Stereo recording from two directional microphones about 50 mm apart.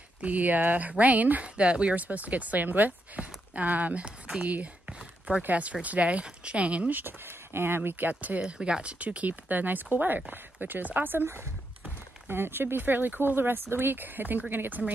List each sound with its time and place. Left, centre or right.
0.2 s speech: right
1.4 s speech: right
4.4 s a sound: right
5.4 s speech: right
6.9 s speech: right
8.4 s speech: centre; by 11.2 s right
12.3 s speech: right